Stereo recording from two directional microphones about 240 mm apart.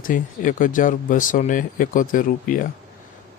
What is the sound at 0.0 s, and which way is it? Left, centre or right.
Speech, left.